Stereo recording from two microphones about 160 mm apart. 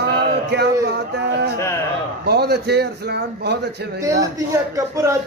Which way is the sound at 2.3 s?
90° right.